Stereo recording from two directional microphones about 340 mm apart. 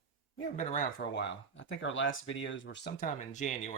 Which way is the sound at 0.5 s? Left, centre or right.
Left.